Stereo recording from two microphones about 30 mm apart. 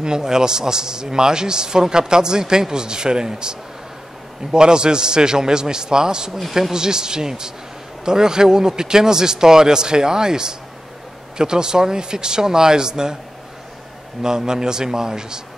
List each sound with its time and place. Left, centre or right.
0.0 s a man's voice: right
14.2 s a man's voice: right